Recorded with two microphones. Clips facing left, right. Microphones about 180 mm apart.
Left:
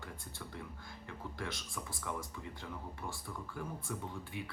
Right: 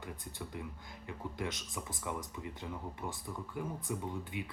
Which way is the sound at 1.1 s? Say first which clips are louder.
Right 4 dB; 20° right (ahead or behind).